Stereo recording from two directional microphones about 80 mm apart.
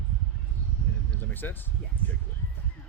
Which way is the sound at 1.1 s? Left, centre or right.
Left.